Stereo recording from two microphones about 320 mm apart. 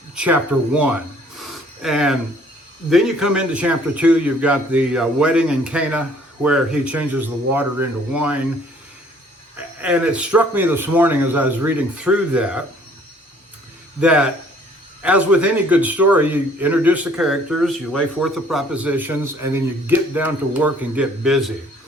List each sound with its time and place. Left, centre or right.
0.2 s speech: centre
1.4 s a sound: centre
2.9 s speech: centre
9.6 s speech: centre
14.0 s speech: centre